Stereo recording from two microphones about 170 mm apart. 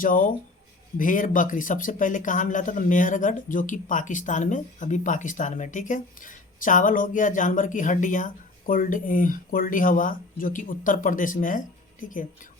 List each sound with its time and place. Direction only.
0.0 s speech: 55° left (ahead or behind)